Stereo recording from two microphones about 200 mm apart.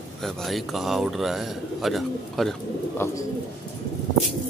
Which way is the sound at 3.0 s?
15° left (ahead or behind).